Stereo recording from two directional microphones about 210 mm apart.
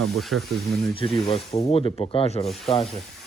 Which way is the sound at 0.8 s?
25° left (ahead or behind).